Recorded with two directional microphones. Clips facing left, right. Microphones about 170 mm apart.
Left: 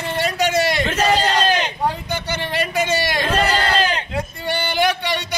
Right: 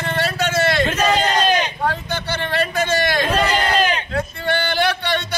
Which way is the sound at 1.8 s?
15° left (ahead or behind).